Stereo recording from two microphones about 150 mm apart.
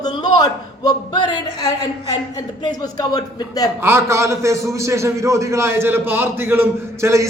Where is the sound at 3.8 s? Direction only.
15° right (ahead or behind).